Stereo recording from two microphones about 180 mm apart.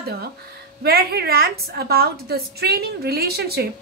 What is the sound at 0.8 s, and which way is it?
A woman's voice, 60° right (ahead or behind).